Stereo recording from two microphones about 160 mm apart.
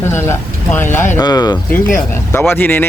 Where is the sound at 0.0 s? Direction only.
15° left (ahead or behind).